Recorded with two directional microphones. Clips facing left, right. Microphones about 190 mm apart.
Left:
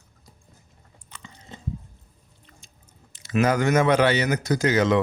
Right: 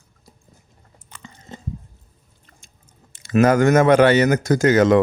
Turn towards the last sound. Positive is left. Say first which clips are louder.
# right 6 dB
turn(degrees=-50)  # may be behind; listen again after turning